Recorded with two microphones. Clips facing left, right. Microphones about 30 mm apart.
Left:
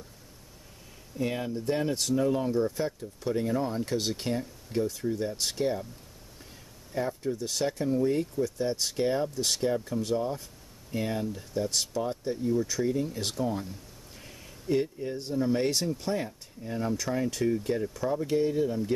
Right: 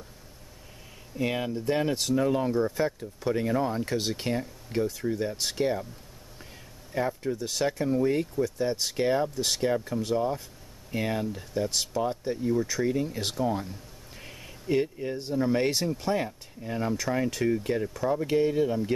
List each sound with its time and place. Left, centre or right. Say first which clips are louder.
1.1 s speech: right 2 dB; right
2.0 s speech: right 1 dB; centre
6.9 s speech: right 2 dB; centre
8.6 s speech: right 2 dB; centre
10.9 s speech: right 2 dB; right
14.1 s a sound: right 4 dB; right
15.3 s speech: right 1 dB; centre